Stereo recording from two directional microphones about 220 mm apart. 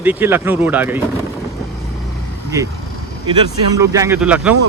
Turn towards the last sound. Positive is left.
turn(degrees=-5)  # may be behind; listen again after turning